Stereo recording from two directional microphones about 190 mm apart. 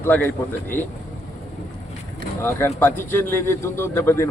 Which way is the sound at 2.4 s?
10° left (ahead or behind).